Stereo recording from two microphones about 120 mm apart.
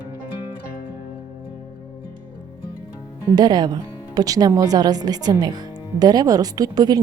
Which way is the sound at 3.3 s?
35° right (ahead or behind).